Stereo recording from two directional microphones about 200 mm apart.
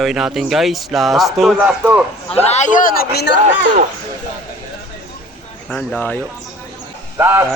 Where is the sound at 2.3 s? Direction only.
35° left (ahead or behind); by 3.3 s 55° left (ahead or behind).